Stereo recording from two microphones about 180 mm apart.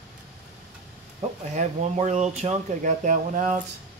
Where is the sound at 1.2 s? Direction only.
35° right (ahead or behind).